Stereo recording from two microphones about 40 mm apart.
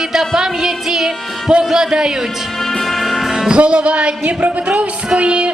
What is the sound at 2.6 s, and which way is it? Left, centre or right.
Music, centre.